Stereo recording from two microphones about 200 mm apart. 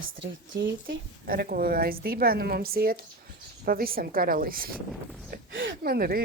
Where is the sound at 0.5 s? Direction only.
70° right (ahead or behind).